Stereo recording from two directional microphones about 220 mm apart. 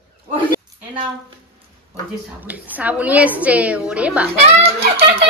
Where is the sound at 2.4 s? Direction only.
5° right (ahead or behind).